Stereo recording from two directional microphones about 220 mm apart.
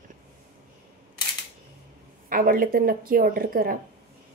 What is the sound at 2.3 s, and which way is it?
Speech, 40° right (ahead or behind).